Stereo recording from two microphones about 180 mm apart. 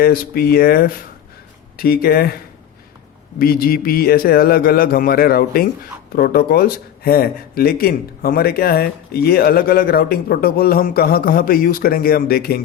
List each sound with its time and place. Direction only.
0.0 s speech: 55° left (ahead or behind)
3.3 s speech: 55° left (ahead or behind)